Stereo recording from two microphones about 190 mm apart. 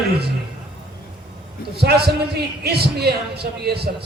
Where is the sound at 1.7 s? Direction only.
60° right (ahead or behind).